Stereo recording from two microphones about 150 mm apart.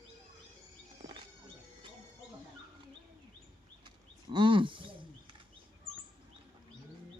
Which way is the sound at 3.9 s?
35° right (ahead or behind).